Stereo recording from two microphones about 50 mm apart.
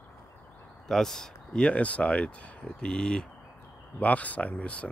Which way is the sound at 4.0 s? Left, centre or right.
Left.